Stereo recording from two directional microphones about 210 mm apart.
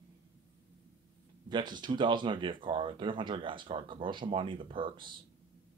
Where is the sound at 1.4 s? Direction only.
20° right (ahead or behind).